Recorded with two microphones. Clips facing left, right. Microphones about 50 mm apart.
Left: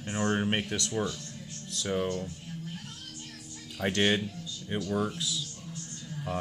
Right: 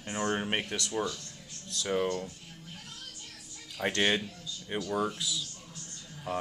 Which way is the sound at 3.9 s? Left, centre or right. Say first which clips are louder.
Left 2 dB; centre.